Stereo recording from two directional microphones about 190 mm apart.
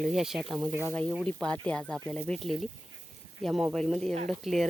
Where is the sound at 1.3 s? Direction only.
5° left (ahead or behind).